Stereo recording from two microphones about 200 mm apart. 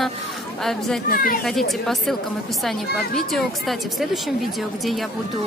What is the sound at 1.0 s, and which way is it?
Speech, 45° left (ahead or behind).